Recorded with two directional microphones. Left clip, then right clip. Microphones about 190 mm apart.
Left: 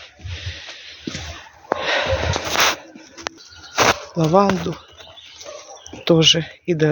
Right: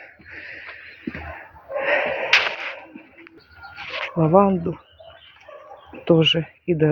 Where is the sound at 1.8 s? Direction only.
65° left (ahead or behind).